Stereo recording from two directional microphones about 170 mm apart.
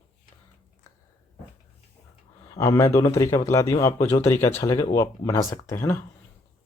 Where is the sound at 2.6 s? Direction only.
15° left (ahead or behind).